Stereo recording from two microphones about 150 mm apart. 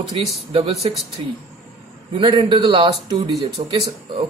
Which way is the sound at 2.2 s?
30° right (ahead or behind).